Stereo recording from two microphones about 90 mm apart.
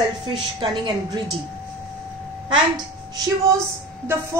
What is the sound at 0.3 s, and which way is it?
Speech, 65° right (ahead or behind).